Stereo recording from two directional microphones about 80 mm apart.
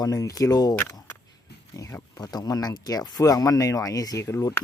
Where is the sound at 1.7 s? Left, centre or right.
Left.